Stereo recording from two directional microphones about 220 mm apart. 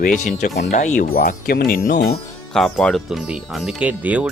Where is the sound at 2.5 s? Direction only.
5° left (ahead or behind).